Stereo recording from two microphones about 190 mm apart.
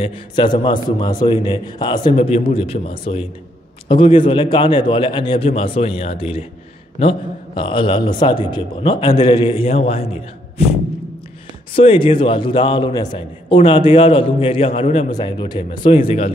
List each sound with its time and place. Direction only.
0.0 s a man's voice: 25° left (ahead or behind)
11.7 s a man's voice: 30° left (ahead or behind)